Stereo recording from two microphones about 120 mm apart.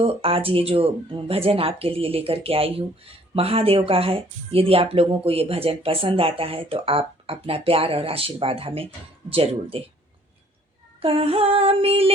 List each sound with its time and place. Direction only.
0.0 s speech: 50° right (ahead or behind)
11.0 s speech: 50° right (ahead or behind)